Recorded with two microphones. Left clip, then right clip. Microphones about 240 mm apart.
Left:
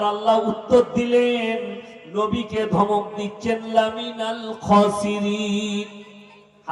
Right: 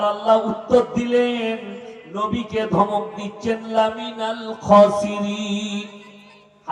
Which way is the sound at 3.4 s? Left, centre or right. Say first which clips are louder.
Right 1 dB; left.